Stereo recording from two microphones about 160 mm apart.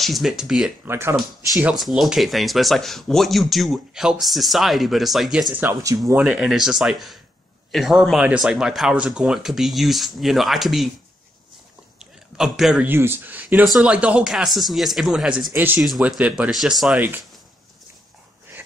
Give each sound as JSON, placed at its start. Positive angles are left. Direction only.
{"t": 0.0, "sound": "speech", "side_deg": 0}
{"t": 0.8, "sound": "speech", "side_deg": -15}
{"t": 1.6, "sound": "speech", "side_deg": -5}
{"t": 5.6, "sound": "speech", "side_deg": -15}
{"t": 6.1, "sound": "speech", "side_deg": -5}
{"t": 12.0, "sound": "speech", "side_deg": 0}